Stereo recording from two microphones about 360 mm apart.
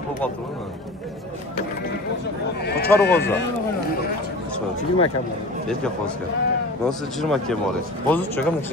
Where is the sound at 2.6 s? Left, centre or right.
Left.